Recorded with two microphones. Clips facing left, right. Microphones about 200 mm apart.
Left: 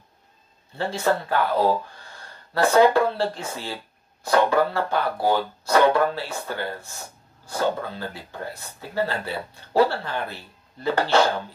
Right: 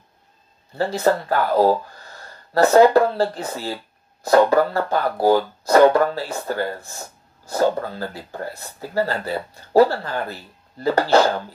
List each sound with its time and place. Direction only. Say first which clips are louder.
0.7 s speech: right 4 dB; 40° right (ahead or behind)